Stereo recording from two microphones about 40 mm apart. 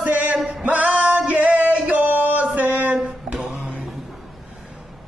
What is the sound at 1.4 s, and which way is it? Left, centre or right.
Music, right.